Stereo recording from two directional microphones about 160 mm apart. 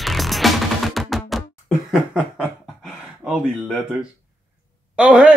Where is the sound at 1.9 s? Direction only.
5° right (ahead or behind).